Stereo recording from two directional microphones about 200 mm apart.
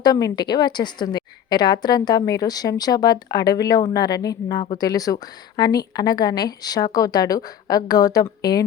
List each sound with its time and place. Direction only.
0.0 s a woman's voice: 20° left (ahead or behind)